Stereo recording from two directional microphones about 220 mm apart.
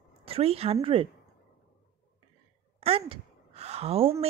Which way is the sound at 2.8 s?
25° right (ahead or behind).